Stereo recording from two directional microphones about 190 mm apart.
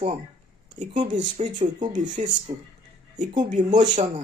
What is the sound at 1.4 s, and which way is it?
Speech, 40° right (ahead or behind).